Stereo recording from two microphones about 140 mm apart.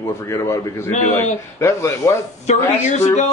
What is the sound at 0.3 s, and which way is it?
Speech, 20° left (ahead or behind).